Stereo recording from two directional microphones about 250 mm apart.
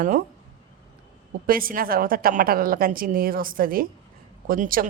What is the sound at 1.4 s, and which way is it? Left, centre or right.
A woman's voice, right.